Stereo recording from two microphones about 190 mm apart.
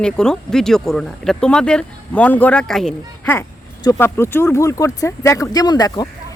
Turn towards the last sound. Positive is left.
turn(degrees=20)  # may be behind; listen again after turning